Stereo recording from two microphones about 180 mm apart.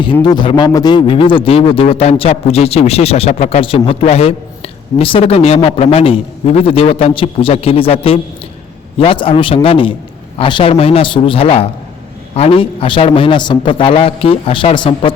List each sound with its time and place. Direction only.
0.0 s a man's voice: 25° left (ahead or behind)